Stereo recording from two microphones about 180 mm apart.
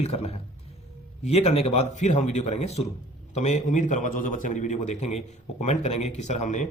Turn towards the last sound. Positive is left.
turn(degrees=45)  # may be behind; listen again after turning